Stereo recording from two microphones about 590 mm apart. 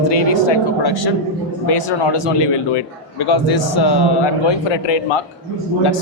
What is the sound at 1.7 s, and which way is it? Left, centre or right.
Speech, left.